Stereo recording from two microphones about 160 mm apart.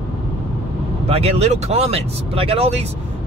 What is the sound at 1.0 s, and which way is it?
Speech, 40° right (ahead or behind).